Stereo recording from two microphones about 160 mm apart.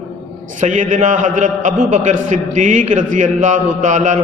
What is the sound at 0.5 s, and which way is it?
A man's voice, 50° right (ahead or behind).